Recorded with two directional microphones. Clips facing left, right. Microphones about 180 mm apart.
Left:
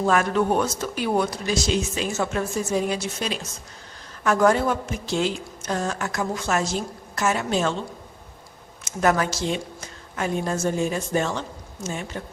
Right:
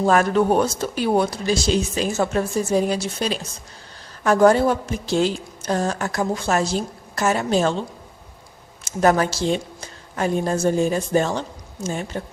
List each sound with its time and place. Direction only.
0.0 s a woman's voice: 35° right (ahead or behind)
8.8 s a woman's voice: 35° right (ahead or behind)